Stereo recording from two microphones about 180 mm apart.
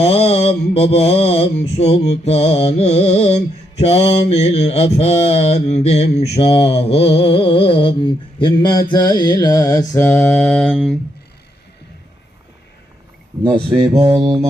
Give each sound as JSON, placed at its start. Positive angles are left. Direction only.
{"t": 0.0, "sound": "mantra", "side_deg": 35}
{"t": 14.0, "sound": "music", "side_deg": -25}